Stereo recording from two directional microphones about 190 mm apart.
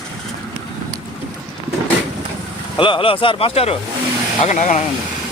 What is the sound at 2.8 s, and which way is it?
Speech, 25° left (ahead or behind).